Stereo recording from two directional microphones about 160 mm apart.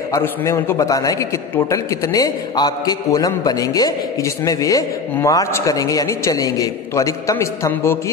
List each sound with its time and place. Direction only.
0.1 s a man's voice: 15° left (ahead or behind)